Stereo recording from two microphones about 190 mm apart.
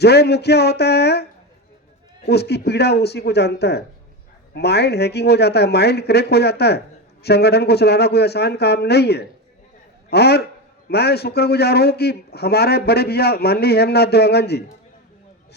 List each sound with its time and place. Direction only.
0.0 s speech: 60° left (ahead or behind)